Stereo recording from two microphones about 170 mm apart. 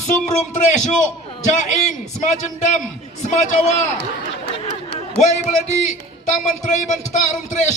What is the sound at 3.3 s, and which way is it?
Speech, 45° left (ahead or behind).